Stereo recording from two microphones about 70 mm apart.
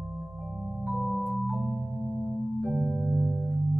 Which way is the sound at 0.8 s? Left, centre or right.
Centre.